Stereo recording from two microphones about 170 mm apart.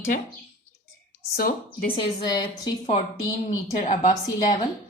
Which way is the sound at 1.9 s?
25° left (ahead or behind).